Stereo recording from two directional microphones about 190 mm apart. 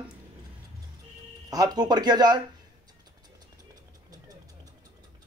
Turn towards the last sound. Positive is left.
turn(degrees=-20)  # may be behind; listen again after turning